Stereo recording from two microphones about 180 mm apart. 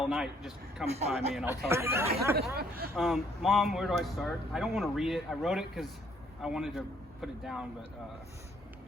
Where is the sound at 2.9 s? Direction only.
Centre (ahead or behind).